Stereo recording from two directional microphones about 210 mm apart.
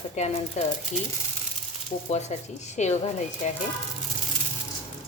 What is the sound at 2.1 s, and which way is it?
Speech, 30° left (ahead or behind).